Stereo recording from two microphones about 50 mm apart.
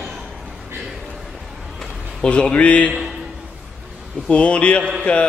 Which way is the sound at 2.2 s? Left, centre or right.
Centre.